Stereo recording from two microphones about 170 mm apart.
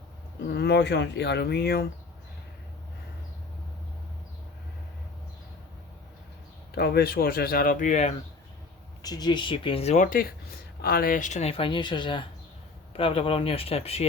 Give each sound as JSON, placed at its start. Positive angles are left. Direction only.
{"t": 0.4, "sound": "speech", "side_deg": 70}
{"t": 6.7, "sound": "speech", "side_deg": 70}
{"t": 9.0, "sound": "speech", "side_deg": 20}